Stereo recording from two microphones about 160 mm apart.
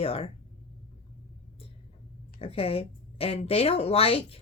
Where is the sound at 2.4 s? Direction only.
35° left (ahead or behind).